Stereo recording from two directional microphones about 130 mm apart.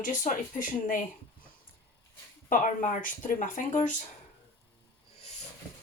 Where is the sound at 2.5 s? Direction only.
90° left.